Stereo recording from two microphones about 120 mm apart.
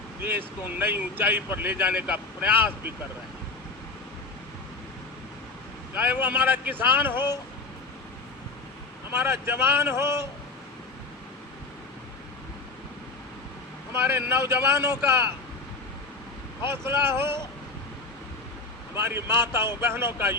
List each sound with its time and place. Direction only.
0.2 s speech: 20° right (ahead or behind)
5.9 s speech: 15° right (ahead or behind)
9.1 s speech: 20° right (ahead or behind)
13.9 s speech: 20° right (ahead or behind)
16.6 s speech: 20° right (ahead or behind)
18.9 s speech: 20° right (ahead or behind)